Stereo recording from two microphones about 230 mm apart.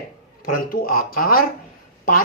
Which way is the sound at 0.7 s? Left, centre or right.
Left.